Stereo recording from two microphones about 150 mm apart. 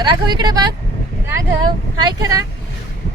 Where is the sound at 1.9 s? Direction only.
25° right (ahead or behind).